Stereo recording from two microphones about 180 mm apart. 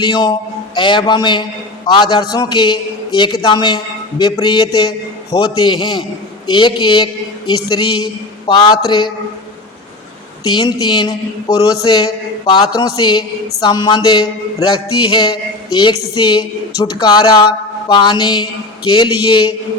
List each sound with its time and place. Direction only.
0.0 s a man's voice: 25° left (ahead or behind)
10.5 s a man's voice: 25° left (ahead or behind)